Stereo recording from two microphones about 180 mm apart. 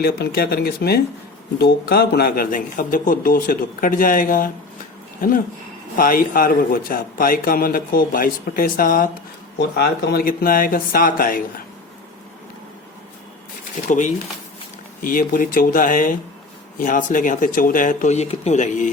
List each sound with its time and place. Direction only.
0.0 s a man's voice: 55° left (ahead or behind)
6.0 s a man's voice: 50° left (ahead or behind)
9.6 s a man's voice: 65° left (ahead or behind)
13.8 s a man's voice: 45° left (ahead or behind)